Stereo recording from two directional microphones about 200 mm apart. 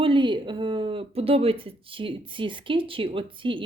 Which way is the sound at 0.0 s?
25° right (ahead or behind).